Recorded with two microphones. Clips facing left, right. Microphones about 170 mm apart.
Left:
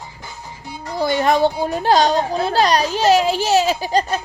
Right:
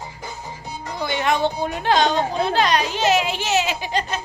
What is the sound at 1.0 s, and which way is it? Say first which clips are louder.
A child's voice: left 5 dB; 40° left (ahead or behind).